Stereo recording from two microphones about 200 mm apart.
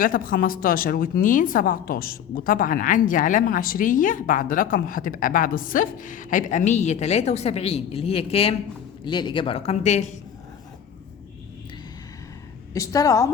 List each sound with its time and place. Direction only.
0.0 s a woman's voice: 45° left (ahead or behind)
12.7 s a woman's voice: 15° left (ahead or behind)